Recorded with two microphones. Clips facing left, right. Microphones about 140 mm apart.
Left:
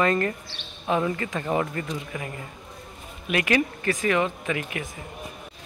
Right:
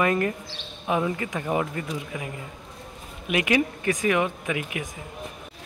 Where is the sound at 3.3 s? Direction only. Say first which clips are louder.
Even; 15° right (ahead or behind).